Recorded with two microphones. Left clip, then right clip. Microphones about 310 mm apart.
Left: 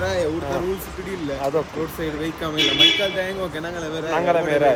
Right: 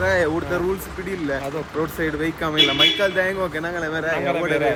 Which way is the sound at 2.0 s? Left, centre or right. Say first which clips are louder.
Right 3 dB; centre.